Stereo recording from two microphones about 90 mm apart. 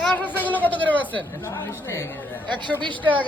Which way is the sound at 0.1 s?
20° left (ahead or behind).